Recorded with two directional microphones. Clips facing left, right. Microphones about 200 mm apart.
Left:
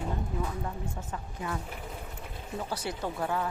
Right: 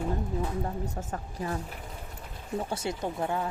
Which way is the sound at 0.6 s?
35° right (ahead or behind).